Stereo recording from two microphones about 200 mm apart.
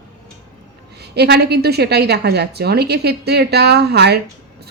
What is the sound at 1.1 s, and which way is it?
Speech, 55° right (ahead or behind).